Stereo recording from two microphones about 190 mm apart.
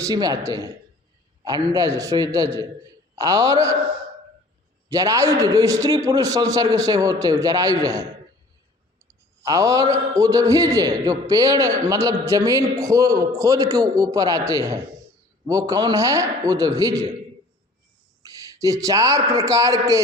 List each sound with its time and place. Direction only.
0.0 s a man's voice: 20° right (ahead or behind)
4.9 s a man's voice: 15° right (ahead or behind)
9.4 s a man's voice: 15° right (ahead or behind)
18.2 s a man's voice: 20° right (ahead or behind)